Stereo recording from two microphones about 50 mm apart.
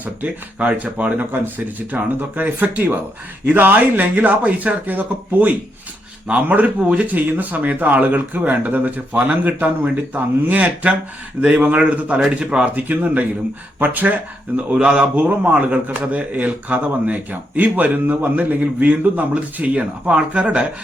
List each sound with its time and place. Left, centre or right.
0.0 s speech: right
6.8 s a man's voice: right
7.2 s a man's voice: right
12.3 s a man's voice: centre
12.7 s speech: right
14.5 s a man's voice: right